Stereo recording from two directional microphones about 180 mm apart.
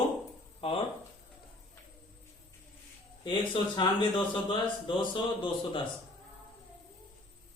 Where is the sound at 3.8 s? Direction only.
25° left (ahead or behind).